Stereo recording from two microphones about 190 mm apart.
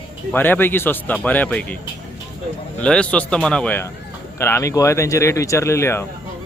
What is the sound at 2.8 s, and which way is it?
Speech, 5° left (ahead or behind).